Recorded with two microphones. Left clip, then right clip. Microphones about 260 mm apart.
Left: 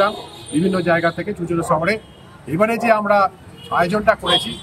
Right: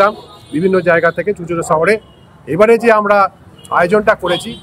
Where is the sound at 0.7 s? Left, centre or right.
Centre.